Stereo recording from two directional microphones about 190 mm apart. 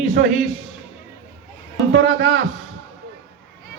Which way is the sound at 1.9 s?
70° right (ahead or behind).